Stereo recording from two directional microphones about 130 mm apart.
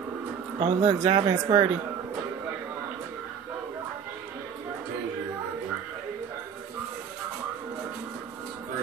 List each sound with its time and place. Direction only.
0.6 s speech: 25° right (ahead or behind)